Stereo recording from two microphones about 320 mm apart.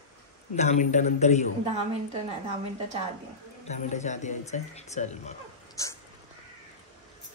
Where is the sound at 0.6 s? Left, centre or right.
Left.